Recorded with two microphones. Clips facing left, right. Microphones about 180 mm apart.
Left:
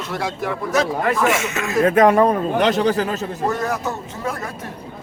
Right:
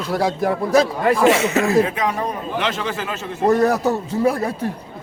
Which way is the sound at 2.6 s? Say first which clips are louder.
Left 8 dB; 40° left (ahead or behind).